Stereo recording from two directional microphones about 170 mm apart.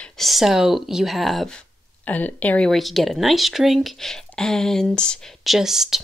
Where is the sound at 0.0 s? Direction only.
Centre (ahead or behind).